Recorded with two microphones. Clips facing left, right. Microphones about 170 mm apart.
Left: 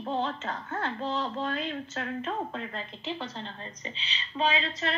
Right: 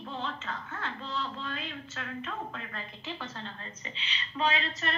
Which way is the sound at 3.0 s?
20° left (ahead or behind).